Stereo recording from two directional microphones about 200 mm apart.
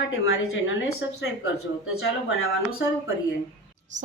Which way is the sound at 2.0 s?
55° left (ahead or behind).